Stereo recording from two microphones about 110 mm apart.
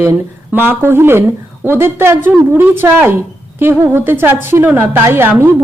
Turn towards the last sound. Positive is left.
turn(degrees=-20)  # may be behind; listen again after turning